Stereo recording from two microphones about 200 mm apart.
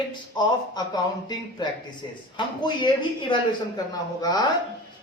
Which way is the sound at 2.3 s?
20° left (ahead or behind).